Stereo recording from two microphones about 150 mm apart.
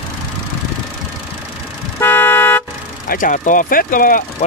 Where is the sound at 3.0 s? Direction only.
70° left (ahead or behind).